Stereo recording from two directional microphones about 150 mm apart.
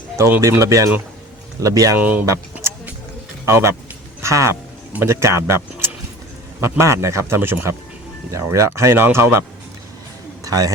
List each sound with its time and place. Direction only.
0.2 s speech: 15° right (ahead or behind)
2.0 s a man's voice: 10° right (ahead or behind)
2.2 s vehicle: 20° right (ahead or behind)
3.4 s a man's voice: 20° right (ahead or behind)
10.4 s a man's voice: 25° right (ahead or behind)